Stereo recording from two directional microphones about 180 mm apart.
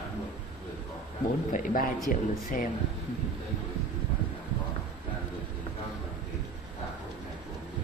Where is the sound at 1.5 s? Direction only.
50° left (ahead or behind).